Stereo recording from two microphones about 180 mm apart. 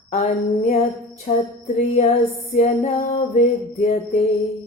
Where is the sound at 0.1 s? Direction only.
40° left (ahead or behind).